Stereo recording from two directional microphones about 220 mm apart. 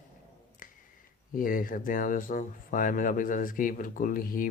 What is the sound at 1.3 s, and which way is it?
Speech, 40° left (ahead or behind).